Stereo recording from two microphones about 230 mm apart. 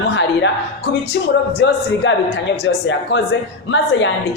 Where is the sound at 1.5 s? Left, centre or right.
Left.